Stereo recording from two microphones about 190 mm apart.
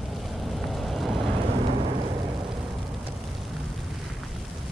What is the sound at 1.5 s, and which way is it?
Vehicle, 40° right (ahead or behind).